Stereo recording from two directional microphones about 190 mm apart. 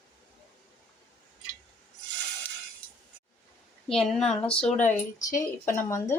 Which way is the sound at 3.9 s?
Centre (ahead or behind).